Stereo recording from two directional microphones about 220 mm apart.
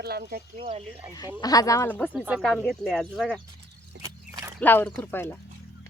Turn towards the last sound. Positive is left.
turn(degrees=10)  # may be behind; listen again after turning